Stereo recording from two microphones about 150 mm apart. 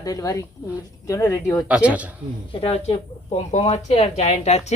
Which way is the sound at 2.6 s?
40° left (ahead or behind).